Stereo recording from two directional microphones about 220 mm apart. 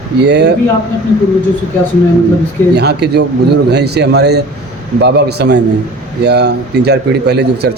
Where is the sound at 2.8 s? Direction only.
50° right (ahead or behind).